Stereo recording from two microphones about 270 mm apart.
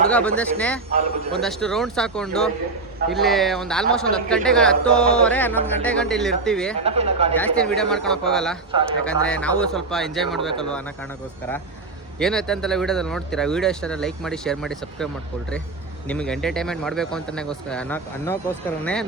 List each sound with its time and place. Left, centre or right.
0.1 s a man's voice: centre
6.7 s speech: right
7.3 s a man's voice: centre
12.2 s a man's voice: centre